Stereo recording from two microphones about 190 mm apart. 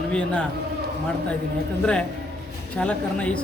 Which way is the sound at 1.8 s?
5° left (ahead or behind).